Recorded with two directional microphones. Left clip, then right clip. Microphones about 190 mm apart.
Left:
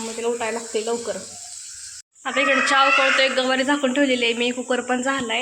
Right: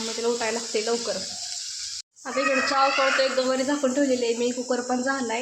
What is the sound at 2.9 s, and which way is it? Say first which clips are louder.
Speech: left 4 dB; 5° right (ahead or behind).